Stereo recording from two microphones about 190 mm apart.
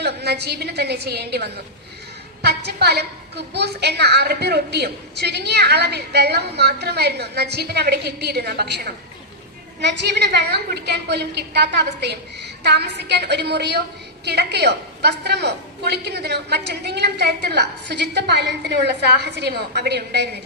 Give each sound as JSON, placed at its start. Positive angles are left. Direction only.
{"t": 0.0, "sound": "a woman's voice", "side_deg": -60}